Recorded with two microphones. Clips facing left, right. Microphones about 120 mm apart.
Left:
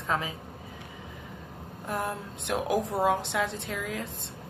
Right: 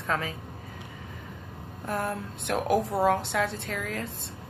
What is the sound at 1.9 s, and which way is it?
A woman's voice, 15° left (ahead or behind).